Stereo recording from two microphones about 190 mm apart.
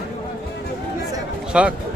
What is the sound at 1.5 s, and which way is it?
Speech, 5° right (ahead or behind).